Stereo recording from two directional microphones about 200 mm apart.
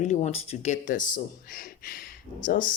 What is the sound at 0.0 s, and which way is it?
Speech, 35° left (ahead or behind).